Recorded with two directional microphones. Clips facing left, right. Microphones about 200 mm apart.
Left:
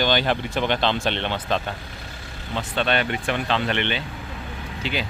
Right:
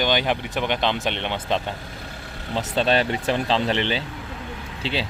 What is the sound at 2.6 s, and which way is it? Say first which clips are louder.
Speech: right 3 dB; 35° right (ahead or behind).